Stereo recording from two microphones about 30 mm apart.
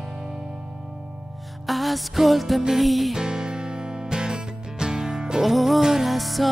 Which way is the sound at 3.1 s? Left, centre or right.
Right.